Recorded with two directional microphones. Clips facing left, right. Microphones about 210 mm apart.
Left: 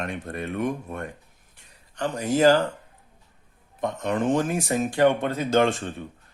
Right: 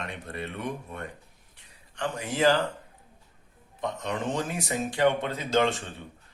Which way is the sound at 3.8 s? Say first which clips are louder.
Left 6 dB; 50° left (ahead or behind).